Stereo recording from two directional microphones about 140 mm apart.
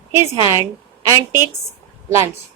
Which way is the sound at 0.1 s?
20° right (ahead or behind).